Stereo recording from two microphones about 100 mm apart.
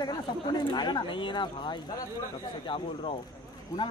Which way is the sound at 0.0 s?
45° left (ahead or behind).